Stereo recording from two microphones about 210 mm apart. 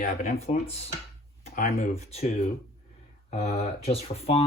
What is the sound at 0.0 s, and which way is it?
Speech, 40° left (ahead or behind).